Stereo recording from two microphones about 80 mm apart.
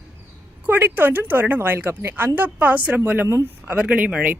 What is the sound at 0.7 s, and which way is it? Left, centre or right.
Speech, right.